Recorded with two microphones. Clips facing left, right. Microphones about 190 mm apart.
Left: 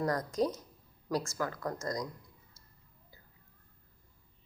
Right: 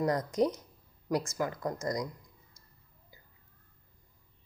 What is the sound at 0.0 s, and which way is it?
A woman's voice, 20° right (ahead or behind).